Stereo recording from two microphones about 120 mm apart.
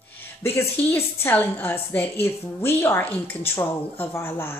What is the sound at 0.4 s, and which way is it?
A woman's voice, 20° left (ahead or behind).